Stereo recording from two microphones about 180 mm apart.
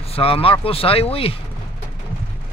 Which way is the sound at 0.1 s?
30° left (ahead or behind).